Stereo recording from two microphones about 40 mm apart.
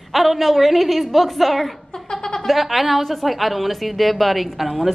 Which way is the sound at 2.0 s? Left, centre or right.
Centre.